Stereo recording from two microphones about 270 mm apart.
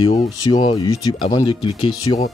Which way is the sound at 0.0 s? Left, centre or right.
Left.